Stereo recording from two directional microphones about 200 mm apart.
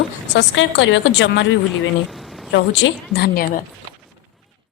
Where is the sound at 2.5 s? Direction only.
60° left (ahead or behind).